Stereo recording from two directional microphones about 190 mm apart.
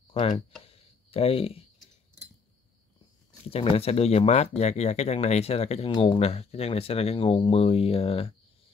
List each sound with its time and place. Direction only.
0.1 s speech: 30° left (ahead or behind)
0.7 s a sound: 30° left (ahead or behind)
3.4 s speech: 30° left (ahead or behind)